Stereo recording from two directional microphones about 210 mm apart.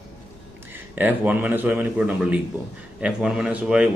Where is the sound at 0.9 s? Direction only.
10° right (ahead or behind).